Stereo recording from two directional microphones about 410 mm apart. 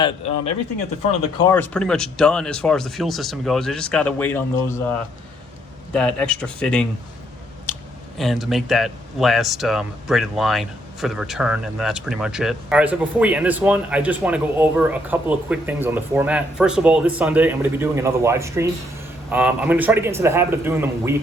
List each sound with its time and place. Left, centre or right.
1.5 s speech: centre
7.7 s a sound: centre
8.2 s speech: centre